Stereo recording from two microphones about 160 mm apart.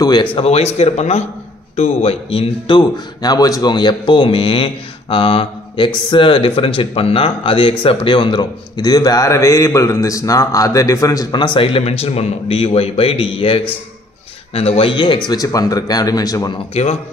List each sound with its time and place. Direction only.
0.0 s a man's voice: 30° left (ahead or behind)
5.1 s mantra: 35° left (ahead or behind)
6.0 s a man's voice: 30° left (ahead or behind)
16.8 s a man's voice: 40° left (ahead or behind)